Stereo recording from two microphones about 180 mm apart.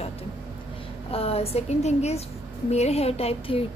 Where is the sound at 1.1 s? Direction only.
35° left (ahead or behind).